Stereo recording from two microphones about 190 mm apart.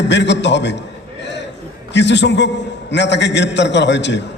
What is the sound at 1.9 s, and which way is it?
A man's voice, 65° left (ahead or behind).